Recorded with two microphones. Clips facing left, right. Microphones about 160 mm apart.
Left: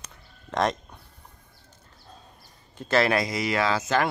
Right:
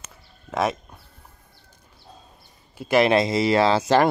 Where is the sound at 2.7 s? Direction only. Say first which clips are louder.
Right 5 dB; 15° right (ahead or behind); by 4.0 s 30° right (ahead or behind).